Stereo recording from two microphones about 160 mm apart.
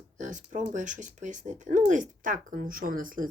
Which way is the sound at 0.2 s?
50° right (ahead or behind).